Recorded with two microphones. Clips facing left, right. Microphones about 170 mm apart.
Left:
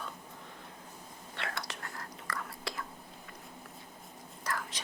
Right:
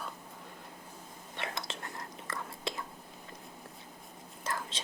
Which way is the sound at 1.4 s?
20° right (ahead or behind).